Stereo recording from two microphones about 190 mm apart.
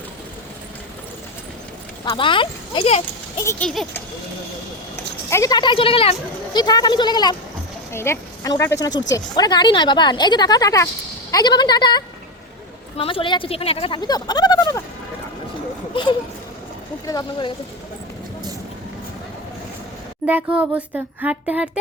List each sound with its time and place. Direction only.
2.0 s speech: 25° left (ahead or behind)
3.4 s a sound: 15° left (ahead or behind)
5.3 s speech: 20° left (ahead or behind)
17.1 s speech: 25° left (ahead or behind)
20.2 s speech: 10° right (ahead or behind)